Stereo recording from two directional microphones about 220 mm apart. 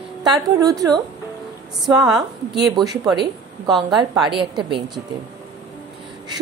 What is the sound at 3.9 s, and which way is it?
Speech, 20° right (ahead or behind).